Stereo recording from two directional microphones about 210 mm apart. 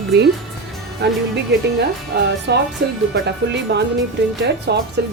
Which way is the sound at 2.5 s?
55° right (ahead or behind).